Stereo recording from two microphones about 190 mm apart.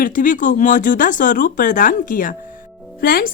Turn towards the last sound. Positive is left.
turn(degrees=50)  # may be behind; listen again after turning